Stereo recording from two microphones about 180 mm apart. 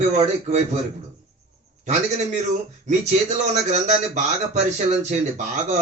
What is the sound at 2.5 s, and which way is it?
A man's voice, 40° right (ahead or behind).